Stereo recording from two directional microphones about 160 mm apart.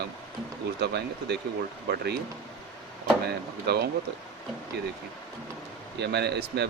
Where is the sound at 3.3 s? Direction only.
90° right.